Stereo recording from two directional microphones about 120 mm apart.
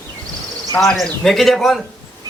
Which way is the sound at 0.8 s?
5° left (ahead or behind).